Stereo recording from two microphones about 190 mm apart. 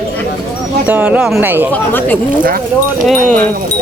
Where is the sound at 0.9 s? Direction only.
5° right (ahead or behind).